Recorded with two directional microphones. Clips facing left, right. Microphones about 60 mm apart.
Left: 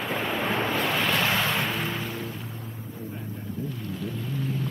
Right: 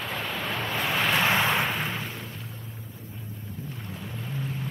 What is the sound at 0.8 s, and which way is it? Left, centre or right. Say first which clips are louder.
Vehicle: left 1 dB; centre.